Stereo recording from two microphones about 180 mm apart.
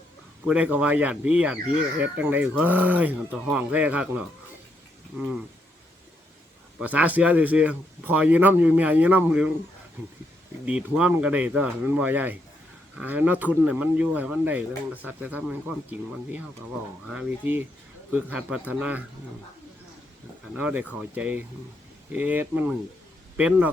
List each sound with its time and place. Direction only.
0.4 s speech: 5° right (ahead or behind)
6.7 s speech: 10° right (ahead or behind)
10.7 s speech: 5° right (ahead or behind)
20.6 s speech: 5° right (ahead or behind)